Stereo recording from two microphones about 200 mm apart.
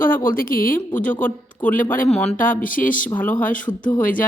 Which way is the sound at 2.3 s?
40° left (ahead or behind).